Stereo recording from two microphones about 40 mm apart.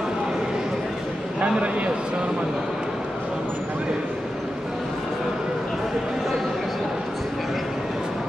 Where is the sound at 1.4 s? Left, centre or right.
Right.